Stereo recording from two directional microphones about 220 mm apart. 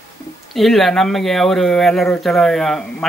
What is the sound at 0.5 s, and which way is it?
Speech, centre (ahead or behind).